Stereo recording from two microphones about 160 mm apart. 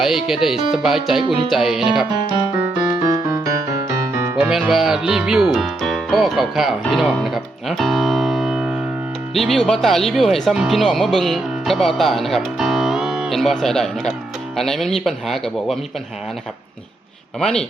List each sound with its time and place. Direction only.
0.0 s speech: centre (ahead or behind)
3.0 s music: 20° right (ahead or behind)
4.4 s speech: 5° right (ahead or behind)
17.4 s speech: 5° left (ahead or behind)